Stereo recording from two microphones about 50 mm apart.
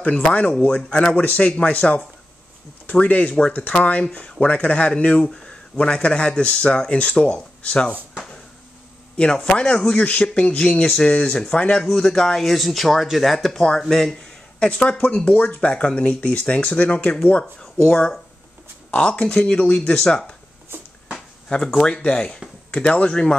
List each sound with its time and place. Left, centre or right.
0.0 s speech: left
9.1 s speech: centre
9.9 s speech: left
11.9 s speech: centre
14.6 s speech: left
17.6 s speech: centre
21.7 s speech: centre